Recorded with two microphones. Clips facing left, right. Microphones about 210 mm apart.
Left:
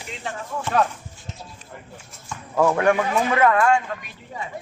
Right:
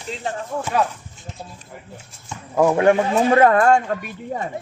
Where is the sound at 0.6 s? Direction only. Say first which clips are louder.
Even; 5° right (ahead or behind).